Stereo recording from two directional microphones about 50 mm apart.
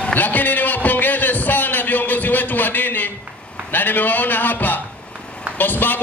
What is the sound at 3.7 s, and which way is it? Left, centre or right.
A man's voice, left.